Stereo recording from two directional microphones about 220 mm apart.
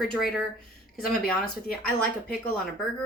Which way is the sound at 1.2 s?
45° left (ahead or behind).